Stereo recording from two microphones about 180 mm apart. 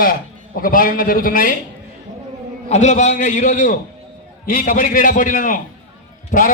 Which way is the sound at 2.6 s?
40° left (ahead or behind).